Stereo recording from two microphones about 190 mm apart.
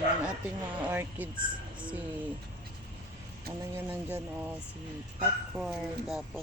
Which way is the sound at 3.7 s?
10° right (ahead or behind).